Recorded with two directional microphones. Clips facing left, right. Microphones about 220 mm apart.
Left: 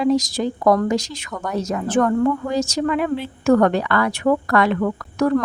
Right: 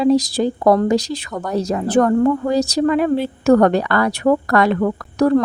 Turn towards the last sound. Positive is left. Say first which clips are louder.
# right 3 dB
turn(degrees=-35)  # may be behind; listen again after turning